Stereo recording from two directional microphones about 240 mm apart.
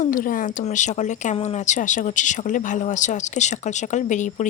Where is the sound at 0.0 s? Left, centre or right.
Left.